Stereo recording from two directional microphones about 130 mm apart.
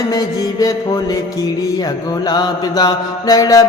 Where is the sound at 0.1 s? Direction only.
30° left (ahead or behind).